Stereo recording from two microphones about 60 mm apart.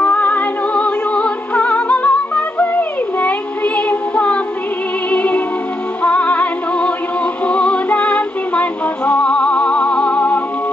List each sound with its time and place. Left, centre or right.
0.0 s music: left
3.2 s child singing: left
5.1 s music: left